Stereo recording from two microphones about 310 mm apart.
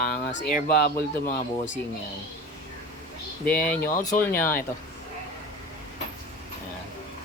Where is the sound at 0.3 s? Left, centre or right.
Left.